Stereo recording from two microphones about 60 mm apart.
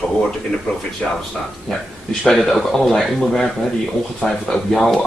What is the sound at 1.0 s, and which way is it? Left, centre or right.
Speech, centre.